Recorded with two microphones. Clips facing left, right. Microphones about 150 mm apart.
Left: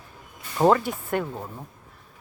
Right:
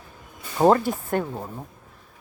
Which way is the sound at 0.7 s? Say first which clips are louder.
Right 2 dB; 35° right (ahead or behind).